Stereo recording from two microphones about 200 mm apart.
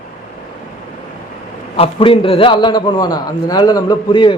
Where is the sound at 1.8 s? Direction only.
25° left (ahead or behind).